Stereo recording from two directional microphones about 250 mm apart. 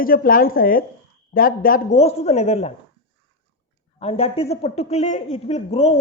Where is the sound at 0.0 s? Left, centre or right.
Left.